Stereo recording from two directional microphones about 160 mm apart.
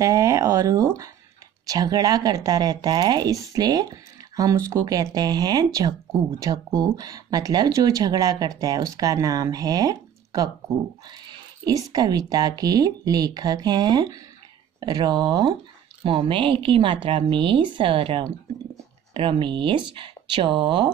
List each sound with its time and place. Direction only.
0.0 s a woman's voice: 20° right (ahead or behind)